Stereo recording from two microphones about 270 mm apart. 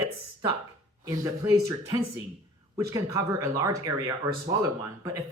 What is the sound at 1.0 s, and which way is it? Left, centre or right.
Speech, centre.